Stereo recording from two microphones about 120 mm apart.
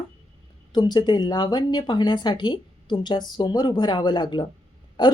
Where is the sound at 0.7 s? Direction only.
35° left (ahead or behind).